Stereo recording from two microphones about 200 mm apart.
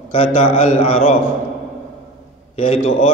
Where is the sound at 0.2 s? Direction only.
40° left (ahead or behind).